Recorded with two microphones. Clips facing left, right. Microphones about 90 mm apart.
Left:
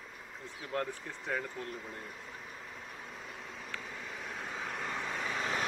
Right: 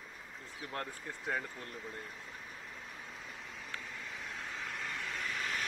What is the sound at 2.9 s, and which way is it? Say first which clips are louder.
Vehicle: left 2 dB; 5° left (ahead or behind).